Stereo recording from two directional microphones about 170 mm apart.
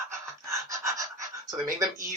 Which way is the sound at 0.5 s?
20° right (ahead or behind).